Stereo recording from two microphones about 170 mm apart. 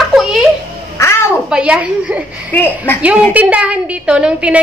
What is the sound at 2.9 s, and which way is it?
A woman's voice, 10° right (ahead or behind).